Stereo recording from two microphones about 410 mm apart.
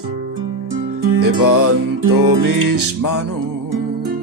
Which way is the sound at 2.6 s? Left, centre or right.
Right.